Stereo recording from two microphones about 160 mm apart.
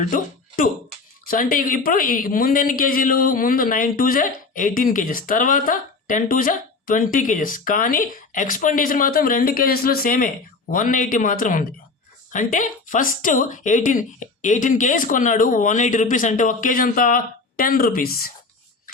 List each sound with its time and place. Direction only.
0.0 s speech: 55° left (ahead or behind)